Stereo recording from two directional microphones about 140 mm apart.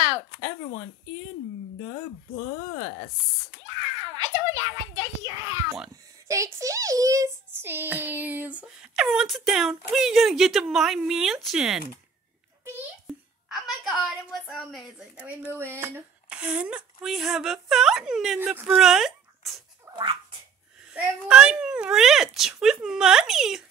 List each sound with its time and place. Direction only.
3.6 s a sound: 30° right (ahead or behind)
6.2 s a child's voice: 20° right (ahead or behind); by 11.8 s 5° right (ahead or behind)
13.0 s a woman's voice: centre (ahead or behind)
18.4 s speech: 10° right (ahead or behind)
20.9 s a child's voice: 5° right (ahead or behind)